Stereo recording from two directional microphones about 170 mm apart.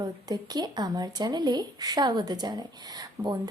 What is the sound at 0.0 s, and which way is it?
Speech, 25° right (ahead or behind).